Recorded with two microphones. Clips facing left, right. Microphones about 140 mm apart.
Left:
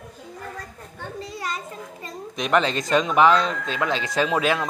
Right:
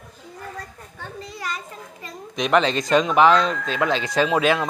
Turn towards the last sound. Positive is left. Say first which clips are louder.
# right 2 dB
turn(degrees=0)  # may be behind; listen again after turning